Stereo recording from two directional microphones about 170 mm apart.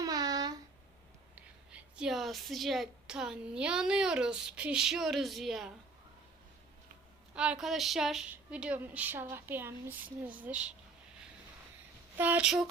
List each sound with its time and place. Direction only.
0.0 s a sound: 20° right (ahead or behind)
1.4 s a woman's voice: 5° right (ahead or behind)
7.3 s a woman's voice: 5° right (ahead or behind)
12.1 s a woman's voice: 10° right (ahead or behind)